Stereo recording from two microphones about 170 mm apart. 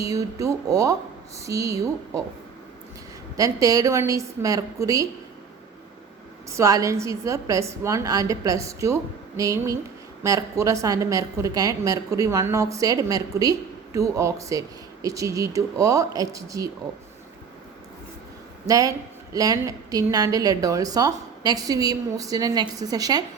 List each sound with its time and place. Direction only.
0.0 s a woman's voice: 20° right (ahead or behind)
3.3 s a woman's voice: 20° right (ahead or behind)
6.5 s a woman's voice: 20° right (ahead or behind)
18.7 s a woman's voice: 20° right (ahead or behind)